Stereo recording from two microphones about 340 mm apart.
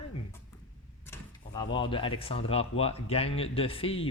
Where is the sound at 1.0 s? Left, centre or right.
Centre.